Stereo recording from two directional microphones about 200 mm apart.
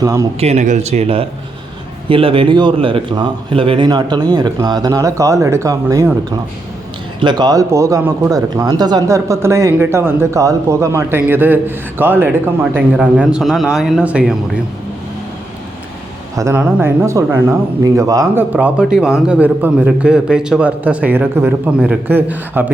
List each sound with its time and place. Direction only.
0.0 s speech: 15° right (ahead or behind)
0.3 s a man's voice: 35° right (ahead or behind); by 6.1 s 15° right (ahead or behind)
7.2 s speech: 20° right (ahead or behind); by 14.3 s 5° right (ahead or behind)
16.4 s speech: 10° right (ahead or behind)